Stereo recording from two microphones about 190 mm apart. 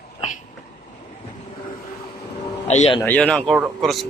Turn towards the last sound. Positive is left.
turn(degrees=0)  # may be behind; listen again after turning